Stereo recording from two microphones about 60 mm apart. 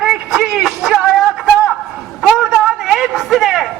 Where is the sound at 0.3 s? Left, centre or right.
Centre.